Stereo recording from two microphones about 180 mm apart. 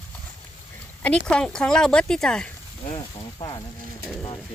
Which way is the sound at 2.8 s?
30° left (ahead or behind).